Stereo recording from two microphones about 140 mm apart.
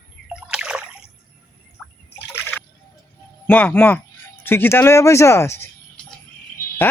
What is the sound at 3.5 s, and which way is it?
Speech, 15° left (ahead or behind).